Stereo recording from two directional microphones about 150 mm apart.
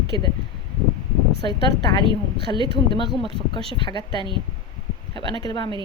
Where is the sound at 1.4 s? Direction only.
35° right (ahead or behind).